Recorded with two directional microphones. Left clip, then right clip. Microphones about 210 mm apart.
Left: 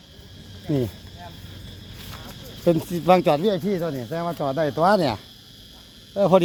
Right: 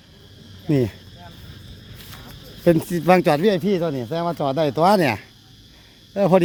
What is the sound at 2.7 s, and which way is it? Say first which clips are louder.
Speech: right 2 dB; 25° right (ahead or behind).